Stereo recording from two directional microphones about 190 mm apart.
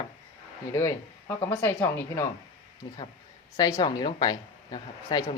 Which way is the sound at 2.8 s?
25° left (ahead or behind).